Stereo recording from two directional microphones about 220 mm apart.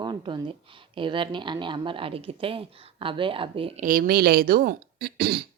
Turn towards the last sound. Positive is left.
turn(degrees=-45)  # may be behind; listen again after turning